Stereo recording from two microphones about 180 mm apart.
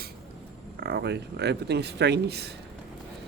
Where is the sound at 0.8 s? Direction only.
70° right (ahead or behind).